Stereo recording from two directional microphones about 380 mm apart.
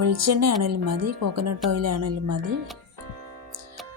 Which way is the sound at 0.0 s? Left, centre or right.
Right.